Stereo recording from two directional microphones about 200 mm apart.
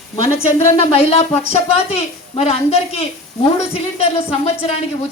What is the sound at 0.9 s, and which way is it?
A woman's voice, 30° left (ahead or behind).